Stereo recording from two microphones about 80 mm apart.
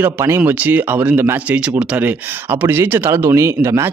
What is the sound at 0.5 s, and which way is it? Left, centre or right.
Speech, right.